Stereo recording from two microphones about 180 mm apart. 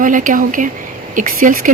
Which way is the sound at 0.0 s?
45° right (ahead or behind).